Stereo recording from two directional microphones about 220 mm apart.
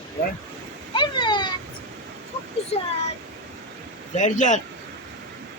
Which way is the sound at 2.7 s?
25° left (ahead or behind).